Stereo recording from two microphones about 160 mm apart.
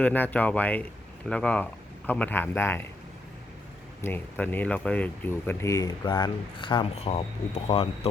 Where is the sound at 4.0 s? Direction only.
15° left (ahead or behind).